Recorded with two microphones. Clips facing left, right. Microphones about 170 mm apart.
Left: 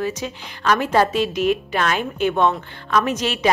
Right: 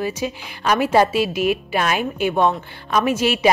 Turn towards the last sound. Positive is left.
turn(degrees=-10)  # may be behind; listen again after turning